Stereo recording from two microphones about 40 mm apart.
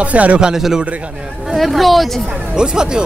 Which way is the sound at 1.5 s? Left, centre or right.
Centre.